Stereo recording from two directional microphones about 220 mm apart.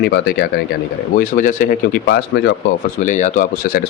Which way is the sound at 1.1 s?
35° left (ahead or behind).